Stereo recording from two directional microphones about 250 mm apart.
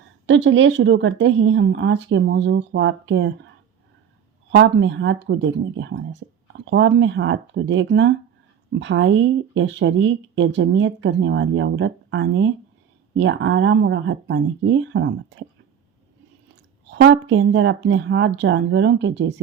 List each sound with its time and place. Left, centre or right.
0.3 s speech: right
4.5 s speech: right
16.9 s speech: right